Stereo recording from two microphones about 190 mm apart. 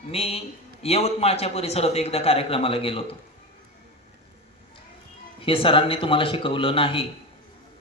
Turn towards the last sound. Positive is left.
turn(degrees=30)  # may be behind; listen again after turning